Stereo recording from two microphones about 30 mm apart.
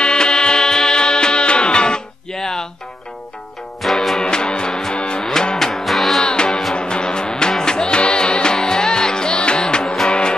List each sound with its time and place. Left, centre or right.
0.0 s music: left
2.3 s music: centre
3.8 s music: centre
4.2 s music: left
5.6 s music: centre
5.9 s music: centre
6.2 s music: left